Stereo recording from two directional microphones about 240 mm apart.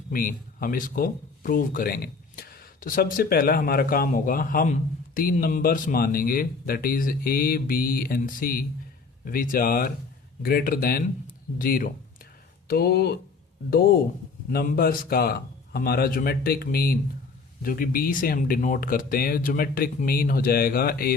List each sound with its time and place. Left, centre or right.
0.1 s speech: left